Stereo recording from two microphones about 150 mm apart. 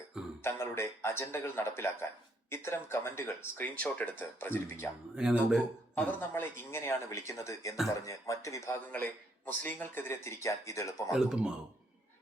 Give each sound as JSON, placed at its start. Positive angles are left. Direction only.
{"t": 0.4, "sound": "a sound", "side_deg": 15}
{"t": 2.5, "sound": "speech", "side_deg": 15}
{"t": 5.1, "sound": "speech", "side_deg": -5}
{"t": 5.9, "sound": "speech", "side_deg": 15}
{"t": 11.1, "sound": "speech", "side_deg": -5}